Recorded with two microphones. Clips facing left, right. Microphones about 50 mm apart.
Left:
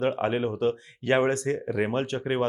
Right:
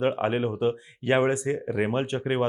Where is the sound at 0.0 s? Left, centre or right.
Centre.